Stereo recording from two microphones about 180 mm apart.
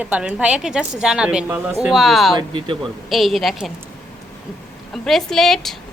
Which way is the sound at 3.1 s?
Centre (ahead or behind).